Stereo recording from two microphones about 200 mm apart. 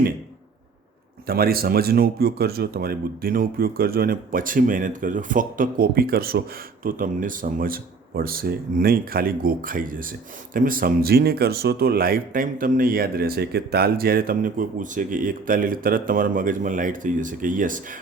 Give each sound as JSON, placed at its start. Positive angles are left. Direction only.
{"t": 1.3, "sound": "speech", "side_deg": -50}